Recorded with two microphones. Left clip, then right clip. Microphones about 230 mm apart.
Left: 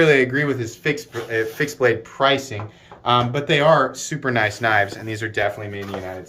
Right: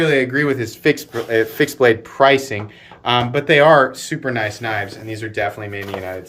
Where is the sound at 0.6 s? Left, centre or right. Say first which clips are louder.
Right 6 dB; right.